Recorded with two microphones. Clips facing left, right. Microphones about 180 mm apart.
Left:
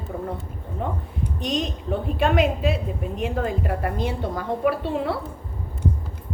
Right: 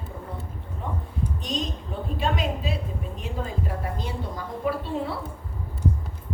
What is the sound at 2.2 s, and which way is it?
A woman's voice, 75° left (ahead or behind).